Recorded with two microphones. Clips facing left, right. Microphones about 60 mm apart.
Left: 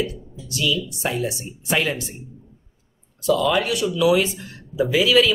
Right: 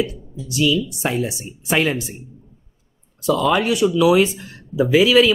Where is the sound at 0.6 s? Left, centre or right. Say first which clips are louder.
Right 5 dB; centre.